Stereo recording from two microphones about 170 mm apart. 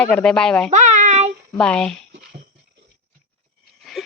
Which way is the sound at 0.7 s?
45° right (ahead or behind).